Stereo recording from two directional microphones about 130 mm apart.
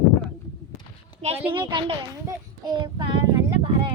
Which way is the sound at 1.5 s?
40° right (ahead or behind).